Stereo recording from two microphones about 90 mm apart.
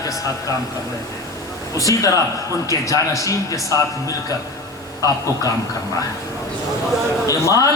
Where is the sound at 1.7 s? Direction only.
40° left (ahead or behind).